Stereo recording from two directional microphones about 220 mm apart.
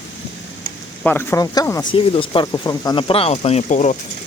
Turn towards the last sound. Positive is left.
turn(degrees=30)  # may be behind; listen again after turning